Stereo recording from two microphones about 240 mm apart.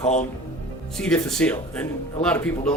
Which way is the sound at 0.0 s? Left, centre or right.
Left.